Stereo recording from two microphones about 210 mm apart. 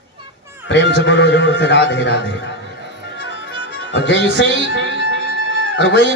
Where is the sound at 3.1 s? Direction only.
55° left (ahead or behind).